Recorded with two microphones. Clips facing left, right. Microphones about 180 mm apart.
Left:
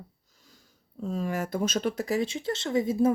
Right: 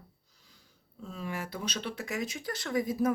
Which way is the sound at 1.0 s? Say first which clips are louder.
Left 8 dB; 40° left (ahead or behind).